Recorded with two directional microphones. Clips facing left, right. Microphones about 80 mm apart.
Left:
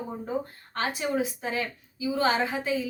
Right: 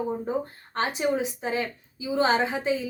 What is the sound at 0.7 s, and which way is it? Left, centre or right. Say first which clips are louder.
A woman's voice: right 3 dB; right.